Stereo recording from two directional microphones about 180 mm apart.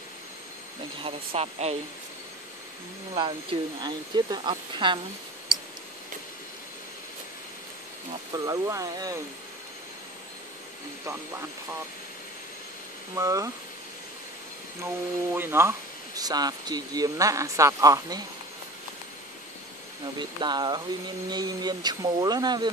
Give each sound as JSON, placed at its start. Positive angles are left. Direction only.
{"t": 1.0, "sound": "speech", "side_deg": -35}
{"t": 3.2, "sound": "speech", "side_deg": -25}
{"t": 8.3, "sound": "speech", "side_deg": -20}
{"t": 13.1, "sound": "speech", "side_deg": -20}
{"t": 15.3, "sound": "speech", "side_deg": -10}
{"t": 20.2, "sound": "speech", "side_deg": -25}